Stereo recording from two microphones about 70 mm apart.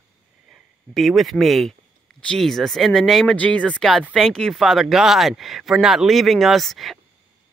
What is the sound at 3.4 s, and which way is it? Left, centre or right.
Speech, centre.